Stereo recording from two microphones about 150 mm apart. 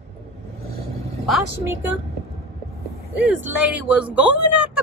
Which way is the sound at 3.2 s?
10° right (ahead or behind).